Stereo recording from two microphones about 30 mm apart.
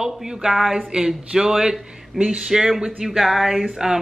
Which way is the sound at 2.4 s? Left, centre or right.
Centre.